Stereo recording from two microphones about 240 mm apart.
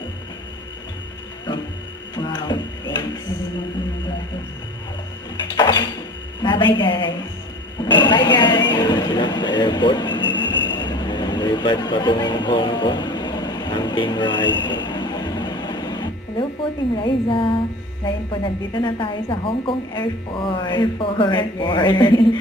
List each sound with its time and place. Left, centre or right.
2.1 s music: centre
5.5 s a sound: centre
6.7 s a woman's voice: centre
10.2 s a sound: centre
10.7 s vehicle: centre
17.0 s a woman's voice: left